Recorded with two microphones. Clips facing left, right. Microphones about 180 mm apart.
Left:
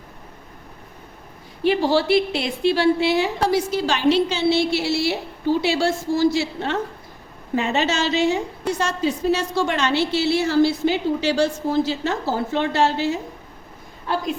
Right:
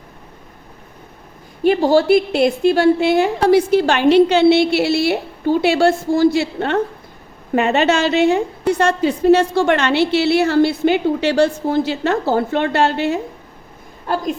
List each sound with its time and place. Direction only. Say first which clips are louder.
1.6 s a woman's voice: right 5 dB; 50° right (ahead or behind)